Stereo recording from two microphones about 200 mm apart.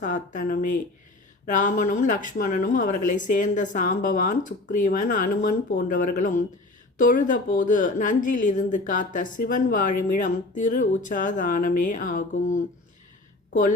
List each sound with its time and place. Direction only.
0.0 s a woman's voice: 40° left (ahead or behind)